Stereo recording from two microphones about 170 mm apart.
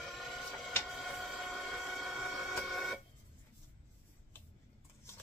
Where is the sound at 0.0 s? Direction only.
Centre (ahead or behind).